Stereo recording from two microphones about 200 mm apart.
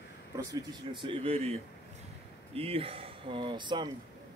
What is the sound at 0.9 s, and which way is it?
Speech, 25° right (ahead or behind).